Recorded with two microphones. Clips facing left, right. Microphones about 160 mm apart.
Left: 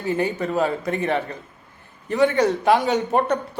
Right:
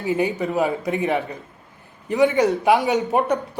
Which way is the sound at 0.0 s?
15° right (ahead or behind).